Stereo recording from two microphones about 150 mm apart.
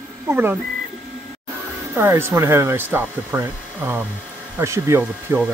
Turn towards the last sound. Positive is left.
turn(degrees=-15)  # may be behind; listen again after turning